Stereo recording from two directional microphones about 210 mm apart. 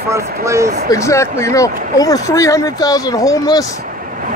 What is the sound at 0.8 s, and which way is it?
Speech, 15° left (ahead or behind).